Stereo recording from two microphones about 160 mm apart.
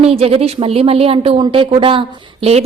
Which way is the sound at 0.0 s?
40° right (ahead or behind).